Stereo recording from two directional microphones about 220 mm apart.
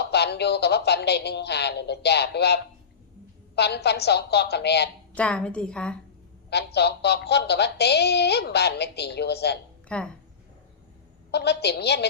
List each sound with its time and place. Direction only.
0.0 s speech: 50° left (ahead or behind)
5.1 s a woman's voice: 5° left (ahead or behind)
6.5 s speech: 50° left (ahead or behind)
9.9 s a woman's voice: 5° left (ahead or behind)
11.3 s speech: 50° left (ahead or behind)